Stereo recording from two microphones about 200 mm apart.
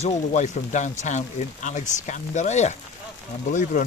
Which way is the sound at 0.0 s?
35° left (ahead or behind).